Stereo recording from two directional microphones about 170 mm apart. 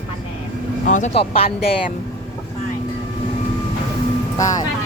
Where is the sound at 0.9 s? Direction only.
45° left (ahead or behind).